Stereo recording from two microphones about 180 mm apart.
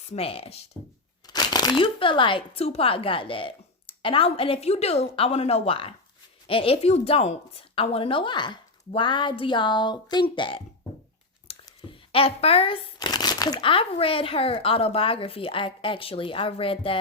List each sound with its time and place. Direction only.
0.1 s speech: 35° left (ahead or behind)
1.3 s speech: 20° left (ahead or behind)
11.6 s speech: 30° left (ahead or behind)